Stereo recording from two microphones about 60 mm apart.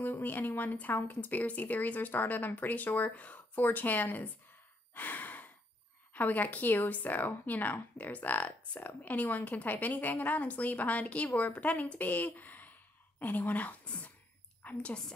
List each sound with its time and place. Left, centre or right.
0.0 s a woman's voice: left
4.9 s sigh: left
6.1 s a woman's voice: left